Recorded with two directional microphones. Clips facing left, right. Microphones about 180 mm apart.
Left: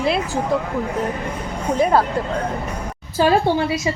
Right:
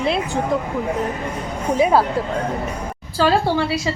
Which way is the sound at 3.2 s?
20° left (ahead or behind).